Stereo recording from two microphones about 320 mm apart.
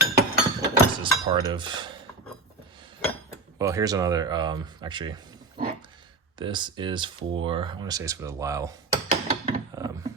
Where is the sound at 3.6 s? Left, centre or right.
Centre.